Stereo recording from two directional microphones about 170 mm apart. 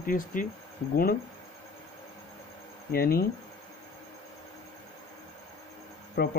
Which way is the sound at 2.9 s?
65° left (ahead or behind).